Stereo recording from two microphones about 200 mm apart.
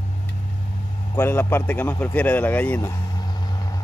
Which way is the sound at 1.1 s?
10° left (ahead or behind).